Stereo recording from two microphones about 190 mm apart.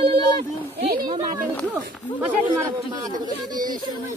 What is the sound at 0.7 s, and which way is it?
Speech, 55° right (ahead or behind).